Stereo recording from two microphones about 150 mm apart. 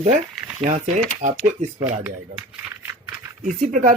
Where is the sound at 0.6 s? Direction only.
50° right (ahead or behind).